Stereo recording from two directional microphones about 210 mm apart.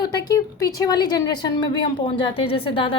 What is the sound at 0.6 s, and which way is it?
A woman's voice, 15° left (ahead or behind).